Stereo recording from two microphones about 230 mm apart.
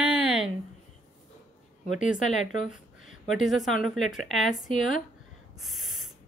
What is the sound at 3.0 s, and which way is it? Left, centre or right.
A woman's voice, centre.